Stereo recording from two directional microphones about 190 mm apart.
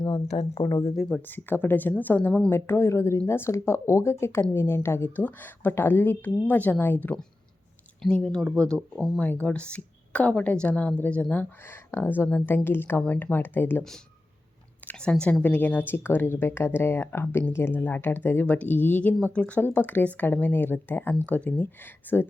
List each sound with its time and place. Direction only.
0.3 s speech: 35° left (ahead or behind)
0.6 s speech: 20° left (ahead or behind)
0.9 s speech: 5° left (ahead or behind)